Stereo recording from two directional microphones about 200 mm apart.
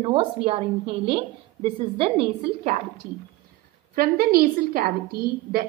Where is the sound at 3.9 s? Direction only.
45° right (ahead or behind).